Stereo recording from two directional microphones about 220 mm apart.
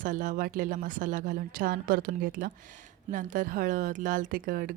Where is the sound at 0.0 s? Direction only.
35° right (ahead or behind).